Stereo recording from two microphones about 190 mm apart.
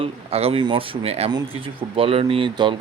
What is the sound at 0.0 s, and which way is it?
Speech, 30° right (ahead or behind).